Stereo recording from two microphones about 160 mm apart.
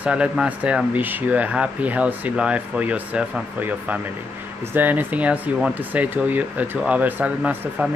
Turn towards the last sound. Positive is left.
turn(degrees=-10)  # may be behind; listen again after turning